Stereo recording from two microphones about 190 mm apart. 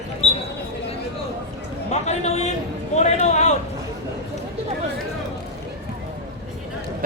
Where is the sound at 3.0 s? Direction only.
35° left (ahead or behind).